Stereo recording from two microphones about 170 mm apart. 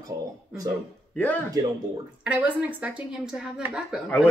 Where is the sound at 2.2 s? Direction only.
10° right (ahead or behind).